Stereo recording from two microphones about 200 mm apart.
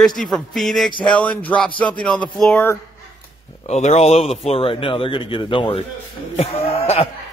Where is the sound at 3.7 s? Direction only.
35° left (ahead or behind).